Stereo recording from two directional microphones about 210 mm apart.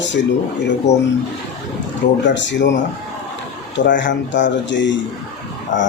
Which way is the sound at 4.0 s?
60° left (ahead or behind).